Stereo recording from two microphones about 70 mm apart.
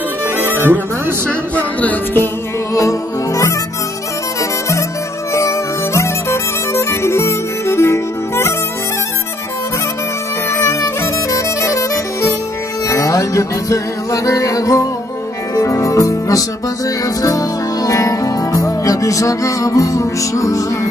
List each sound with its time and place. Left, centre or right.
0.4 s music: right
1.5 s music: left
2.7 s music: left
5.3 s music: left
10.5 s music: left